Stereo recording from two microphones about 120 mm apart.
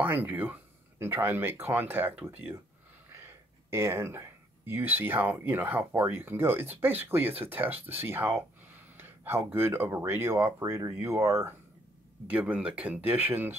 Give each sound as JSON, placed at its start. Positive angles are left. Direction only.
{"t": 0.0, "sound": "speech", "side_deg": -15}
{"t": 12.3, "sound": "speech", "side_deg": -10}